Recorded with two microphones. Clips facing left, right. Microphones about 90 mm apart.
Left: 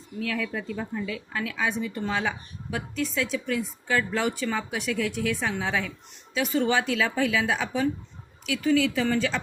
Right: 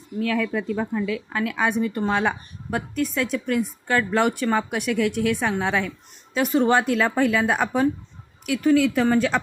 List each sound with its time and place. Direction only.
0.2 s a woman's voice: 55° right (ahead or behind)